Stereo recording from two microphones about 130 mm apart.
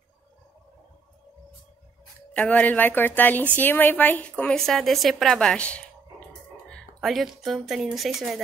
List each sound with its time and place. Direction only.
2.3 s a woman's voice: 10° left (ahead or behind)
7.0 s a woman's voice: centre (ahead or behind)